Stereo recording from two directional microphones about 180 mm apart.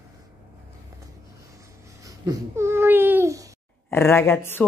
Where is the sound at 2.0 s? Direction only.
20° right (ahead or behind).